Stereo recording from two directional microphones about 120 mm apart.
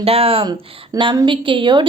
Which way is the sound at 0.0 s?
55° right (ahead or behind).